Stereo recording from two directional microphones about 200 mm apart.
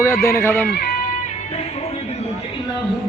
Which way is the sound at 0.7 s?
50° left (ahead or behind).